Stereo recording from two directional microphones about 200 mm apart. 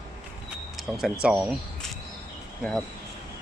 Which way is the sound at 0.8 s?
Centre (ahead or behind).